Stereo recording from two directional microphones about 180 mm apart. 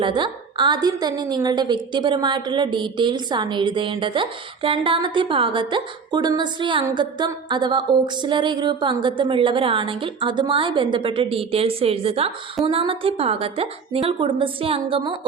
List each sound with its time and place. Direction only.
0.0 s a woman's voice: 25° right (ahead or behind)